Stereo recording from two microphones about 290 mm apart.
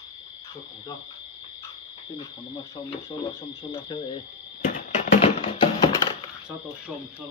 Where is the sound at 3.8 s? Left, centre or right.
Centre.